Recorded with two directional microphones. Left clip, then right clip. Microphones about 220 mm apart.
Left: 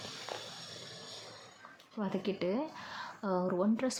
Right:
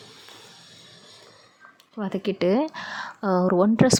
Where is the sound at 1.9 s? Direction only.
35° right (ahead or behind).